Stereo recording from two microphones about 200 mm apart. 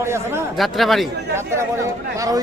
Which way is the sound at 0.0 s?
15° right (ahead or behind).